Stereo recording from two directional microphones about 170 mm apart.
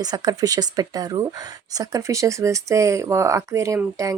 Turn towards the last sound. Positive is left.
turn(degrees=-20)  # may be behind; listen again after turning